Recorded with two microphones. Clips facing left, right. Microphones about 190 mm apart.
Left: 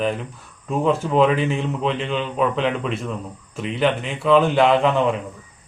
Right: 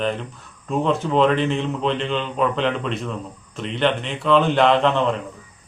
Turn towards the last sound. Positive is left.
turn(degrees=5)  # may be behind; listen again after turning